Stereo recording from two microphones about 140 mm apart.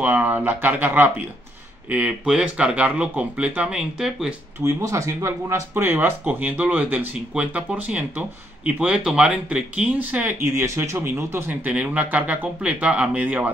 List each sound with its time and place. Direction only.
0.0 s speech: 15° right (ahead or behind)
4.6 s speech: 20° right (ahead or behind)